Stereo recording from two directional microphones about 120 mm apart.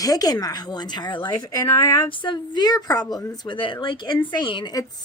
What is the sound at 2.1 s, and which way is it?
Speech, 45° left (ahead or behind).